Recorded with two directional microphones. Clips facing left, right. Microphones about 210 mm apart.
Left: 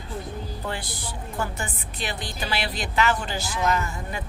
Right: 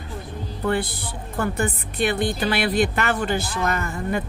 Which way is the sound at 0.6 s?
55° right (ahead or behind).